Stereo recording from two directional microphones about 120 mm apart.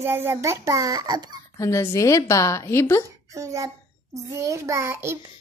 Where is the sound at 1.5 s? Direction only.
25° left (ahead or behind).